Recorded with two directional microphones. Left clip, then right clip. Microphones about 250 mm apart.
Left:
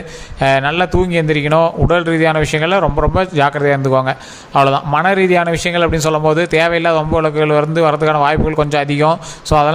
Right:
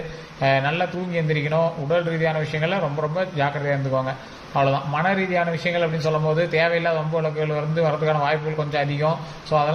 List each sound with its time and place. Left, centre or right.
0.3 s a man's voice: left